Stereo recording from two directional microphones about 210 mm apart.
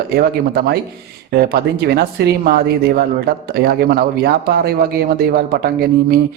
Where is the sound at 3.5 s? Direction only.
50° right (ahead or behind).